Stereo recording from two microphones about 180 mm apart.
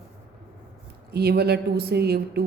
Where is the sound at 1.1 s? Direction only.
60° right (ahead or behind).